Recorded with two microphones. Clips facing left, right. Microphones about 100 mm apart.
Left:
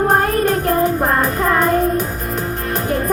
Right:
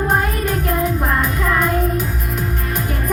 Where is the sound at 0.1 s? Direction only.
40° left (ahead or behind).